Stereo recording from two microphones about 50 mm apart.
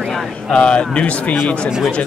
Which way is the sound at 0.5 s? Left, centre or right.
Left.